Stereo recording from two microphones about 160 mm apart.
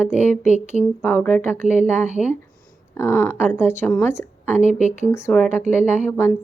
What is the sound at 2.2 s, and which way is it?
Speech, centre (ahead or behind).